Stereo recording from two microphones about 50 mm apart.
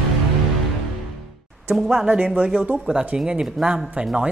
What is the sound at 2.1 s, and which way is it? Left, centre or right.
Speech, right.